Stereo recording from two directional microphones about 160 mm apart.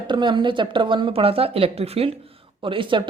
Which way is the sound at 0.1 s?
30° right (ahead or behind).